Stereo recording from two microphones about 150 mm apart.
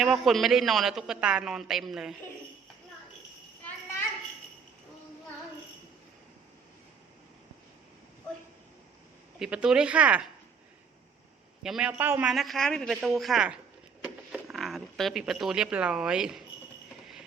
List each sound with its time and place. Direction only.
0.0 s a man's voice: centre (ahead or behind)
9.4 s speech: 5° right (ahead or behind)
11.6 s speech: 5° right (ahead or behind)
12.3 s a man's voice: centre (ahead or behind)